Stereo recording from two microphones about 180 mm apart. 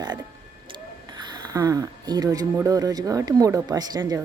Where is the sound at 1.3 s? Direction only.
20° right (ahead or behind).